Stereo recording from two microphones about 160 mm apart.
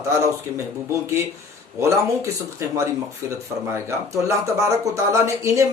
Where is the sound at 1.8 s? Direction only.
20° right (ahead or behind).